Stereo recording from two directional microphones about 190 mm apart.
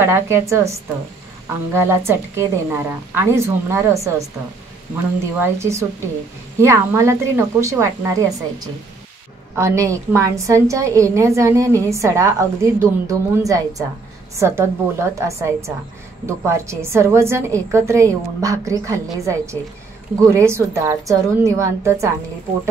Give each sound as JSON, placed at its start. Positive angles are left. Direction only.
{"t": 0.0, "sound": "a woman's voice", "side_deg": -15}
{"t": 5.4, "sound": "a woman's voice", "side_deg": -15}